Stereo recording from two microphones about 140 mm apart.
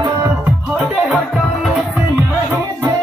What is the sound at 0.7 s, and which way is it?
Music, 5° right (ahead or behind).